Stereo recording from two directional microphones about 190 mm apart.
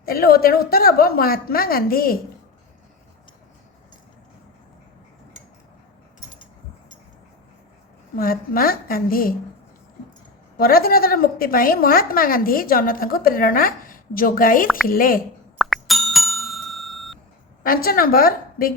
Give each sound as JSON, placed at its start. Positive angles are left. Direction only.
{"t": 0.0, "sound": "a woman's voice", "side_deg": 50}
{"t": 8.1, "sound": "a woman's voice", "side_deg": 50}
{"t": 10.6, "sound": "a woman's voice", "side_deg": 50}
{"t": 15.5, "sound": "plop", "side_deg": 0}
{"t": 17.6, "sound": "a woman's voice", "side_deg": 50}